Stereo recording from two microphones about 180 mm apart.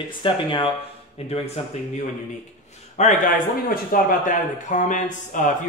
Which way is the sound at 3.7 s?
50° left (ahead or behind).